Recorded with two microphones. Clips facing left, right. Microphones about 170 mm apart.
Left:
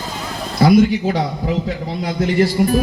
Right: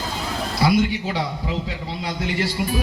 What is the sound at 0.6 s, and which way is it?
Speech, 45° left (ahead or behind).